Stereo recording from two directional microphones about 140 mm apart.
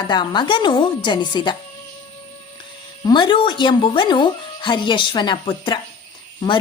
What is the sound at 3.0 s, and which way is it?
Speech, 35° left (ahead or behind).